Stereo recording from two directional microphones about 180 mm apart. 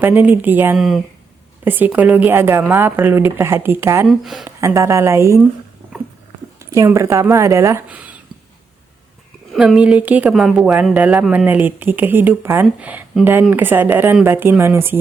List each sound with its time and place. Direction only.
0.0 s a woman's voice: 10° right (ahead or behind)
4.0 s speech: centre (ahead or behind)
4.4 s a woman's voice: 15° right (ahead or behind)
6.6 s a woman's voice: 15° right (ahead or behind)
9.5 s a woman's voice: 5° right (ahead or behind)